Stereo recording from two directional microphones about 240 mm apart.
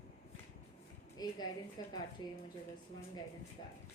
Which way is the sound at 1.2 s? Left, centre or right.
Centre.